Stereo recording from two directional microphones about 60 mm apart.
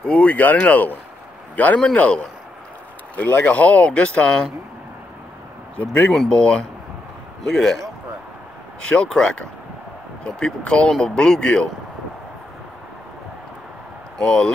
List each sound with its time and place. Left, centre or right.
0.0 s speech: left
5.8 s speech: left
8.8 s speech: centre
14.1 s speech: centre